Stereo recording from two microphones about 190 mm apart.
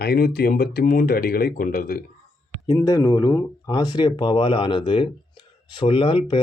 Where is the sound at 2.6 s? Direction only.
20° left (ahead or behind).